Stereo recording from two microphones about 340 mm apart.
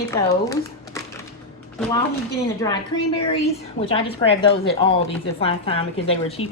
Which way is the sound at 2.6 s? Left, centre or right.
Centre.